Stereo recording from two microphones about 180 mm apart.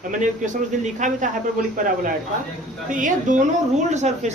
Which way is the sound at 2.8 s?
45° right (ahead or behind).